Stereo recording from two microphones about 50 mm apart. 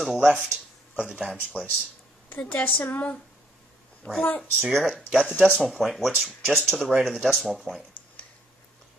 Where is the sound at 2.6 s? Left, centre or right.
Left.